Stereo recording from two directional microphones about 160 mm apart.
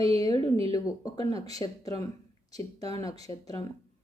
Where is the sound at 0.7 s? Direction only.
25° left (ahead or behind).